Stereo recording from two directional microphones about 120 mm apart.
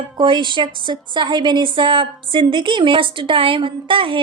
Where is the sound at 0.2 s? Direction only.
40° right (ahead or behind).